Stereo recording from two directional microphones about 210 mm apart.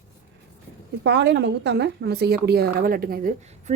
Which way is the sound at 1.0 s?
55° right (ahead or behind).